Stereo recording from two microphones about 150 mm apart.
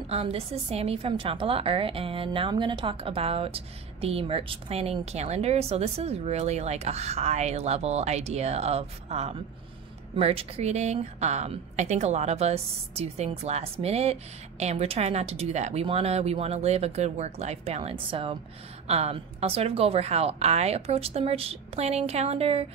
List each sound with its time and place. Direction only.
0.1 s a woman's voice: 40° right (ahead or behind)